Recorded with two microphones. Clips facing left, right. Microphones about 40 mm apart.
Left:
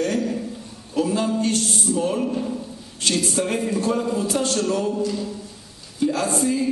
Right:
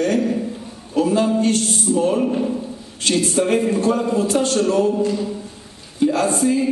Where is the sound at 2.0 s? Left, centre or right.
Centre.